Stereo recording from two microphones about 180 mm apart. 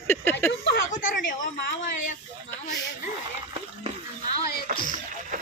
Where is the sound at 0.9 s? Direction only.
45° left (ahead or behind).